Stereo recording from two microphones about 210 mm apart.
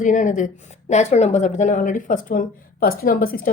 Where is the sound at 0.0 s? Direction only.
35° left (ahead or behind).